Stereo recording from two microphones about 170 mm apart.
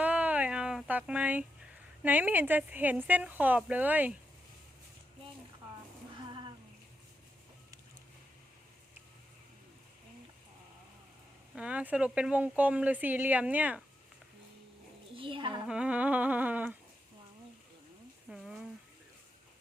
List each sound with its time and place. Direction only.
0.0 s a sound: 10° right (ahead or behind)
2.0 s speech: 10° right (ahead or behind)
11.5 s speech: 5° right (ahead or behind)
15.1 s a child's voice: 30° right (ahead or behind)
15.6 s speech: 5° right (ahead or behind)
18.3 s a sound: 5° right (ahead or behind)